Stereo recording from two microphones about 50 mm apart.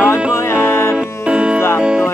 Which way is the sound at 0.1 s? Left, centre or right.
Left.